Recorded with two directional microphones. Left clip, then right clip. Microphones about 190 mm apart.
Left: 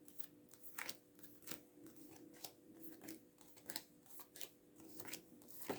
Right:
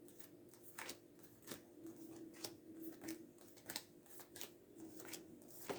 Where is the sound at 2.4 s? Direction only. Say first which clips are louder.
Right 6 dB; 10° left (ahead or behind).